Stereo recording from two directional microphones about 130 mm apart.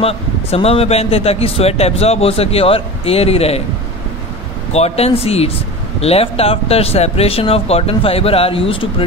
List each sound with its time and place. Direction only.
0.0 s speech: 50° left (ahead or behind)
4.7 s speech: 50° left (ahead or behind)